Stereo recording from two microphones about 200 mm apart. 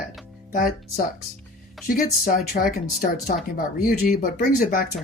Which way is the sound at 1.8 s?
45° left (ahead or behind).